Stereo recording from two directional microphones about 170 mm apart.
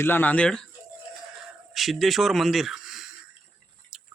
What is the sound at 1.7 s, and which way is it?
Speech, centre (ahead or behind).